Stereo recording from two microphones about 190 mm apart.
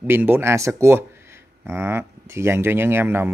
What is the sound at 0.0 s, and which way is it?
Speech, 10° right (ahead or behind).